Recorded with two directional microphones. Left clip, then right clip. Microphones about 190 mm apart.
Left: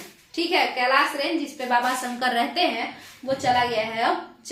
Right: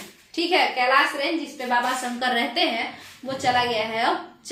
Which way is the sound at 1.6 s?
10° left (ahead or behind).